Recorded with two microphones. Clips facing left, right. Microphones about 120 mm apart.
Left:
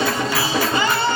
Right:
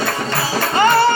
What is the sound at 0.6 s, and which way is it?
Music, 55° right (ahead or behind).